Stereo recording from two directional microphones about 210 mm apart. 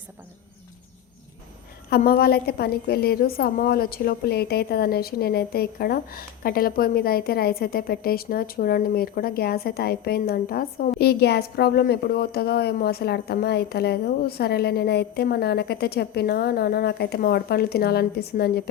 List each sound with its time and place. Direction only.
1.9 s a woman's voice: 45° left (ahead or behind)